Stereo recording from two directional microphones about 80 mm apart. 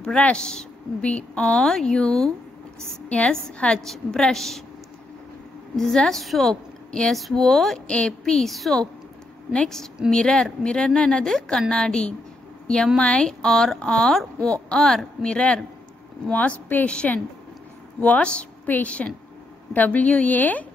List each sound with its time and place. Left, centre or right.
0.0 s a woman's voice: centre
5.8 s a woman's voice: centre; by 20.6 s left